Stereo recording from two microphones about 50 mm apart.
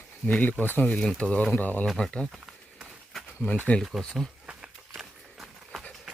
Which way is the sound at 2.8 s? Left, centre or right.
Centre.